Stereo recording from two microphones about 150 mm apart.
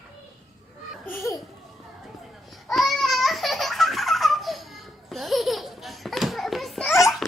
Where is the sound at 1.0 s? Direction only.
15° left (ahead or behind).